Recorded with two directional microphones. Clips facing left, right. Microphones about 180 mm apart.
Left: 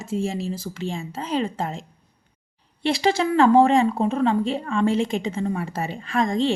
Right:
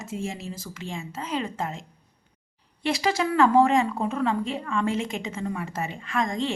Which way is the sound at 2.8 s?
30° left (ahead or behind).